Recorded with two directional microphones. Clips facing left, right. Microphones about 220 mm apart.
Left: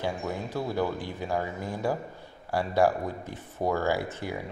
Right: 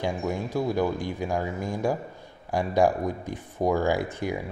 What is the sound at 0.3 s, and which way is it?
Speech, 15° right (ahead or behind).